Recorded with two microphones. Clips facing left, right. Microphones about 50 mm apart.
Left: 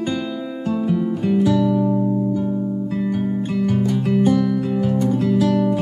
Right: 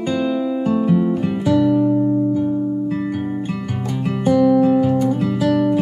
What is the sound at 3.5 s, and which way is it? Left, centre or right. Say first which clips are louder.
Music: left 5 dB; centre.